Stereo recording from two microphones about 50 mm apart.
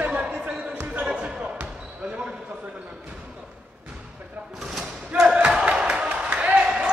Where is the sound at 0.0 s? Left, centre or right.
Right.